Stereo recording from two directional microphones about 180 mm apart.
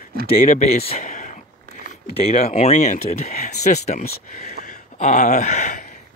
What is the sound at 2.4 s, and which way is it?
Speech, 40° left (ahead or behind).